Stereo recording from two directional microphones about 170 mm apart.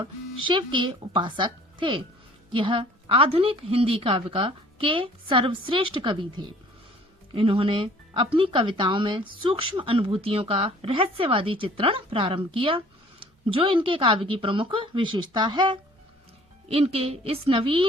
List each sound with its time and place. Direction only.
0.0 s speech: 30° right (ahead or behind)